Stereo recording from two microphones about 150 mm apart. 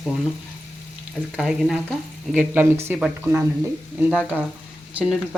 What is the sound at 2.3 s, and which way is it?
Speech, 10° right (ahead or behind).